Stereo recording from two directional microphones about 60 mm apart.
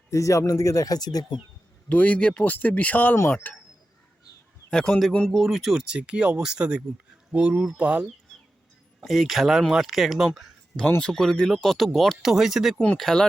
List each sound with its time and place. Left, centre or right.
0.1 s speech: left
1.9 s speech: left
4.7 s speech: centre
5.3 s speech: centre; by 8.0 s right
9.0 s speech: centre
13.0 s speech: centre